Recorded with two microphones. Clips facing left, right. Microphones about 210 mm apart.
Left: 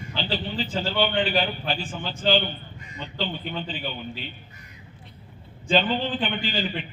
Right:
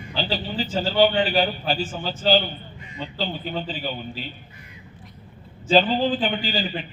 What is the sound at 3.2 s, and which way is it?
A man's voice, 40° right (ahead or behind).